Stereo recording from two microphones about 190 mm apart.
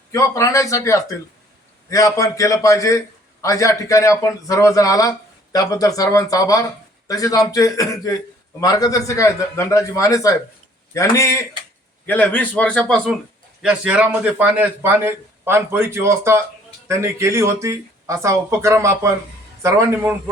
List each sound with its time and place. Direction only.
0.1 s a man's voice: 15° left (ahead or behind)
13.6 s a man's voice: 5° right (ahead or behind)